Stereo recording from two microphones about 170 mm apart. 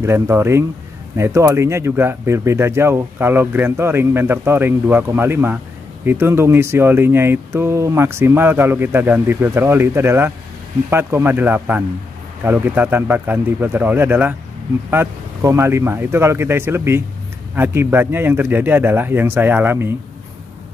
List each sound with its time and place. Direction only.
0.0 s speech: 15° right (ahead or behind)